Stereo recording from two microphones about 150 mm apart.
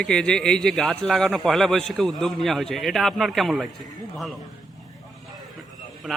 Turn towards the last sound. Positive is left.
turn(degrees=0)  # may be behind; listen again after turning